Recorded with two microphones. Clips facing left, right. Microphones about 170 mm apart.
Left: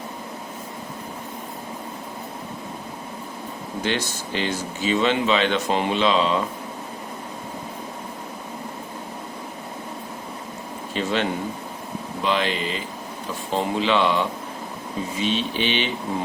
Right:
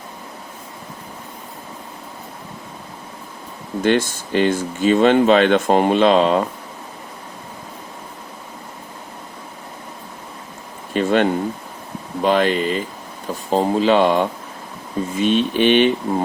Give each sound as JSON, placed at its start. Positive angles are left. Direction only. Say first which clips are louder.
{"t": 3.8, "sound": "speech", "louder": "right 9 dB", "side_deg": -50}
{"t": 10.9, "sound": "speech", "louder": "right 7 dB", "side_deg": -50}